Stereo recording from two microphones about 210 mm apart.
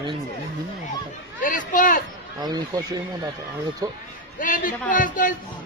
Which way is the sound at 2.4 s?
20° right (ahead or behind).